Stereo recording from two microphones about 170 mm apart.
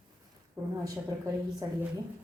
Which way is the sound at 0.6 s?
20° right (ahead or behind).